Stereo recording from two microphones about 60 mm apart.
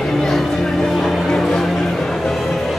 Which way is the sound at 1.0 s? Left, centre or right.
Centre.